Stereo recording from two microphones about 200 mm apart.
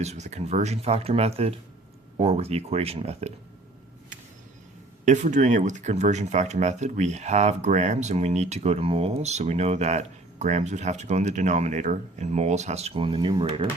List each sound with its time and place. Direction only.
0.0 s speech: 35° right (ahead or behind)
5.0 s speech: 35° right (ahead or behind)